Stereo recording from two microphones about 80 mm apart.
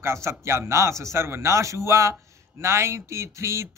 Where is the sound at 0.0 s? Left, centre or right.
Right.